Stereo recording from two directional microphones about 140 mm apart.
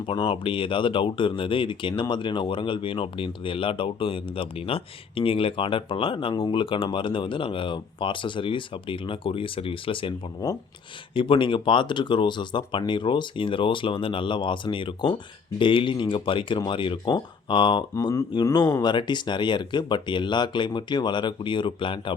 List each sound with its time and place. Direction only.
0.0 s speech: 40° left (ahead or behind)
11.1 s speech: 35° left (ahead or behind)
17.9 s speech: 20° left (ahead or behind); by 22.1 s 35° left (ahead or behind)